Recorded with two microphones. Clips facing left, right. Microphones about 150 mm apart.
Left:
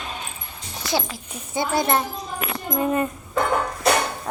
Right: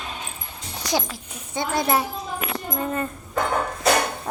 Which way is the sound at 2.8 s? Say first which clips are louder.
Left 6 dB; 15° left (ahead or behind).